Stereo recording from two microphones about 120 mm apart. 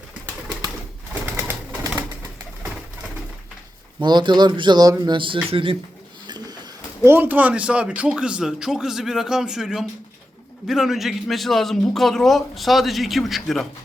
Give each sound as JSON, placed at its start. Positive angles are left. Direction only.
{"t": 4.0, "sound": "speech", "side_deg": -40}
{"t": 5.1, "sound": "speech", "side_deg": -45}
{"t": 6.2, "sound": "a sound", "side_deg": -35}
{"t": 7.0, "sound": "a man's voice", "side_deg": -15}